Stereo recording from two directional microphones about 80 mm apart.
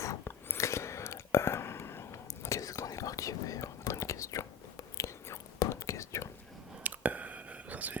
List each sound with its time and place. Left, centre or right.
0.3 s whispering: left
6.8 s whispering: centre